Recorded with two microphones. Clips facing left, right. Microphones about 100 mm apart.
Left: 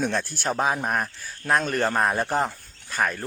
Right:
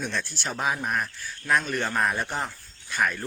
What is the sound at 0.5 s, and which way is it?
Speech, 30° left (ahead or behind).